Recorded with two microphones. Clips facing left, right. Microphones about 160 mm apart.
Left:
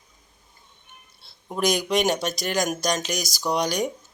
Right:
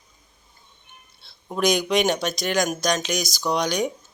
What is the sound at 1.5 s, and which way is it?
Speech, 5° left (ahead or behind).